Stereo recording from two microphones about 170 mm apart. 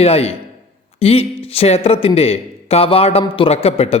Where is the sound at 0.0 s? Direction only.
35° left (ahead or behind).